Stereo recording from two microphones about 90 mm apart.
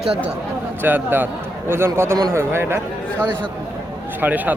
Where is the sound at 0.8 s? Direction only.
20° right (ahead or behind).